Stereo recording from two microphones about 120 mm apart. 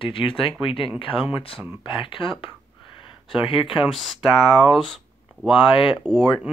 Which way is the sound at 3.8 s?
Centre (ahead or behind).